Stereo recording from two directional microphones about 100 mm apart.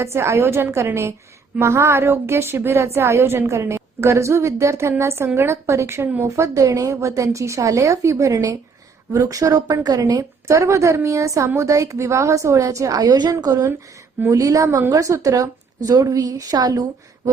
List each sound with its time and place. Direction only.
0.0 s a woman's voice: 25° right (ahead or behind)
10.5 s a woman's voice: 30° right (ahead or behind)